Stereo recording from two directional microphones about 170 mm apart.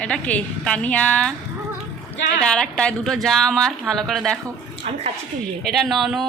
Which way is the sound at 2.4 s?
5° left (ahead or behind).